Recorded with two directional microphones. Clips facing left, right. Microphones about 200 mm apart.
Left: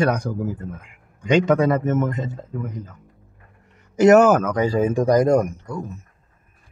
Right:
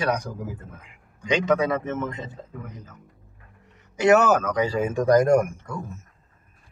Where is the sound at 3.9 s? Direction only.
45° left (ahead or behind).